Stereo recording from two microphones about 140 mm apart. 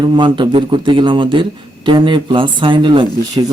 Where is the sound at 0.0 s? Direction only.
35° right (ahead or behind).